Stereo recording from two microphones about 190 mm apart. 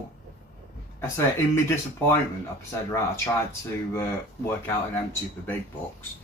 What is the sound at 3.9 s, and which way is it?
Speech, 15° left (ahead or behind).